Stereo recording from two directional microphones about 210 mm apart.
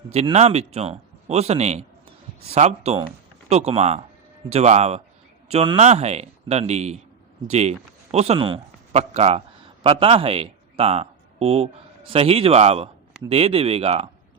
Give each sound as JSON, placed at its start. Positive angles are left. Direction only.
{"t": 0.1, "sound": "a man's voice", "side_deg": -30}